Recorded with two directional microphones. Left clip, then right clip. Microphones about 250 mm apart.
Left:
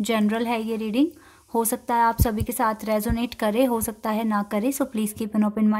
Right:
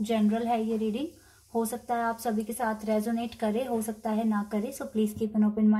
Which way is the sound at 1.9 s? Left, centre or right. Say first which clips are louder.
Left 10 dB; left.